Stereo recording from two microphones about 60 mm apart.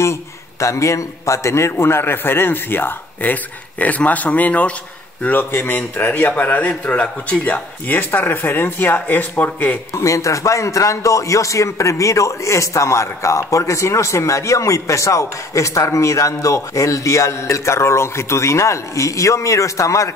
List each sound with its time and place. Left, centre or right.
0.0 s a man's voice: left
9.9 s a man's voice: left